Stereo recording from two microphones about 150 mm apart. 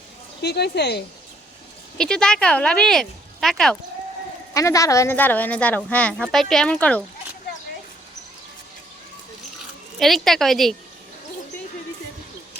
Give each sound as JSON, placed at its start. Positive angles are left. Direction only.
{"t": 0.4, "sound": "speech", "side_deg": 90}
{"t": 2.0, "sound": "speech", "side_deg": 5}
{"t": 4.5, "sound": "a woman's voice", "side_deg": 20}
{"t": 10.0, "sound": "speech", "side_deg": 0}